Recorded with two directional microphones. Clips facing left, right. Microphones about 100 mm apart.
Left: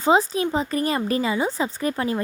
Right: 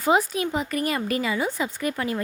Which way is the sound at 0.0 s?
30° left (ahead or behind).